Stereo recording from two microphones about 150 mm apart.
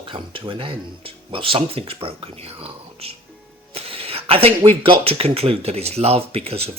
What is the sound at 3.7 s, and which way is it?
Speech, 40° right (ahead or behind).